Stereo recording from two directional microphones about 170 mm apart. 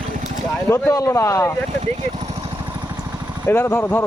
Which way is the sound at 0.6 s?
15° left (ahead or behind).